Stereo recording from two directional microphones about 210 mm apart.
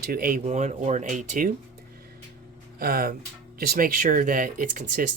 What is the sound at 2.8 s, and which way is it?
Speech, 45° right (ahead or behind).